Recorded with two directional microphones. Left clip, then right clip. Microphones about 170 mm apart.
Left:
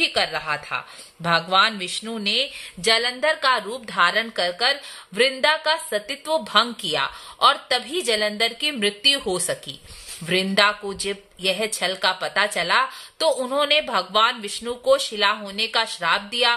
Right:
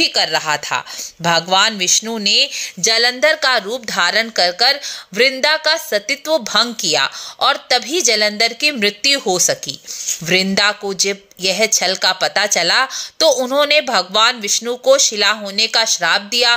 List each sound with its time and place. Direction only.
0.0 s speech: 30° right (ahead or behind)